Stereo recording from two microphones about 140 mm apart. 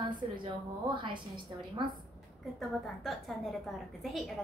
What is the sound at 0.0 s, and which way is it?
A woman's voice, 35° right (ahead or behind).